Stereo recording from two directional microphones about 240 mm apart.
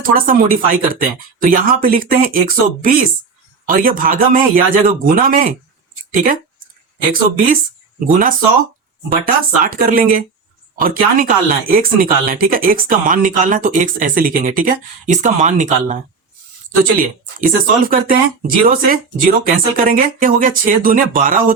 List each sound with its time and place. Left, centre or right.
0.0 s speech: right
17.0 s speech: right